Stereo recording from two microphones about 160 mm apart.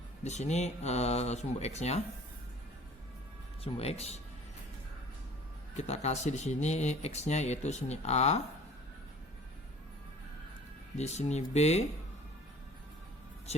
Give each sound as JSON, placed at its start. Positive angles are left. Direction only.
{"t": 0.3, "sound": "speech", "side_deg": 45}
{"t": 3.6, "sound": "speech", "side_deg": 40}
{"t": 5.7, "sound": "speech", "side_deg": 45}
{"t": 10.9, "sound": "speech", "side_deg": 45}
{"t": 13.5, "sound": "speech", "side_deg": 40}